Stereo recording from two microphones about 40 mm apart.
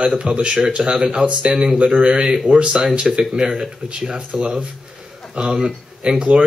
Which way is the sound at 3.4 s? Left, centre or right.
Centre.